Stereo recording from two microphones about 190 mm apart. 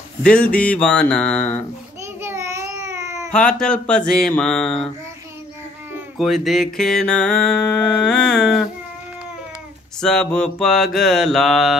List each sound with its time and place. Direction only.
0.2 s music: 5° left (ahead or behind)
2.2 s baby cry: 15° right (ahead or behind)
3.3 s music: 5° left (ahead or behind)
5.9 s music: centre (ahead or behind)
9.9 s music: 5° left (ahead or behind)